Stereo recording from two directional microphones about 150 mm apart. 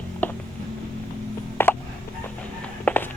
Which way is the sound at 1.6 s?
15° left (ahead or behind).